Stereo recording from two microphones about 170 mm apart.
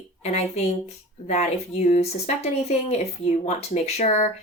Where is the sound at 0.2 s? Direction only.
40° left (ahead or behind).